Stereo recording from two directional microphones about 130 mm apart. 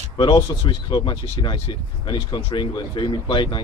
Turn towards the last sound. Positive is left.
turn(degrees=40)  # may be behind; listen again after turning